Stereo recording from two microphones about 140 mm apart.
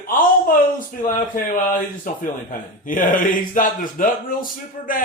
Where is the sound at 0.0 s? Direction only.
80° left.